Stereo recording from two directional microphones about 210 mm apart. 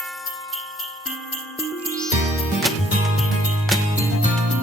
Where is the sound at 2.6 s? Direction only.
Centre (ahead or behind).